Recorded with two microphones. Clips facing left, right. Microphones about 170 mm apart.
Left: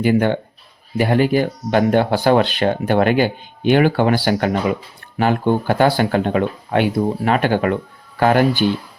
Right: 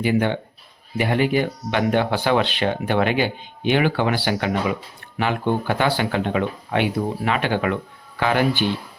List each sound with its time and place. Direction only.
0.0 s speech: 45° left (ahead or behind)